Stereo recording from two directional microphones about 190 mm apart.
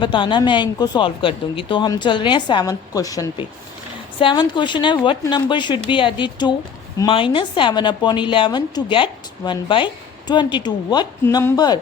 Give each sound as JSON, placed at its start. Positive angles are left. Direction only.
{"t": 0.0, "sound": "a woman's voice", "side_deg": 25}